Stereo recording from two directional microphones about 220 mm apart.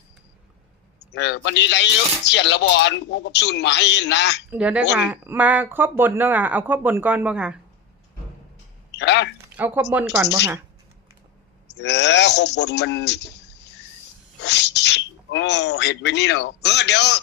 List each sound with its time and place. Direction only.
0.9 s speech: 50° left (ahead or behind)
4.5 s speech: 5° right (ahead or behind)
8.9 s a sound: 50° left (ahead or behind)
9.6 s speech: 10° right (ahead or behind)
11.7 s speech: 50° left (ahead or behind)